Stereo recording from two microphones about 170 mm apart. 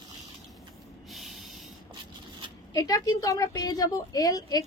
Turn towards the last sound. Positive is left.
turn(degrees=20)  # may be behind; listen again after turning